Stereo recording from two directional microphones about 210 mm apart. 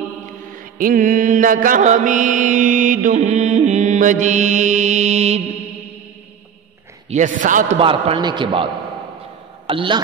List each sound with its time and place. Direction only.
0.7 s mantra: 40° right (ahead or behind)
7.1 s mantra: 35° right (ahead or behind)
7.8 s a man's voice: 25° right (ahead or behind)
9.7 s a man's voice: 25° right (ahead or behind)